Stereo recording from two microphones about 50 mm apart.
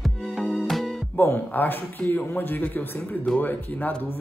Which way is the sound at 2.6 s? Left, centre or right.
Left.